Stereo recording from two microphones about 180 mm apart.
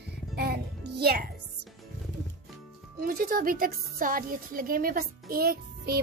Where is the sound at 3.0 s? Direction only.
55° right (ahead or behind).